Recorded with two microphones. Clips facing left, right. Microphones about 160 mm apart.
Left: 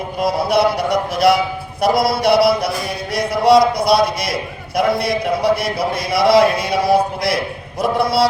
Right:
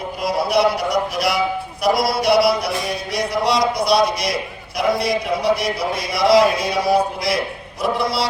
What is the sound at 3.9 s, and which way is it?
Speech, centre (ahead or behind).